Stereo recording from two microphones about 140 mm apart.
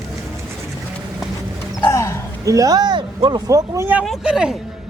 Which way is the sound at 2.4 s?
25° right (ahead or behind).